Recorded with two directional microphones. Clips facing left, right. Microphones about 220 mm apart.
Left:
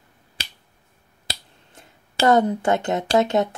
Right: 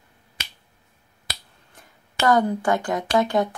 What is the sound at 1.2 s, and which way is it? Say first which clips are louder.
Speech: left 3 dB; 25° left (ahead or behind).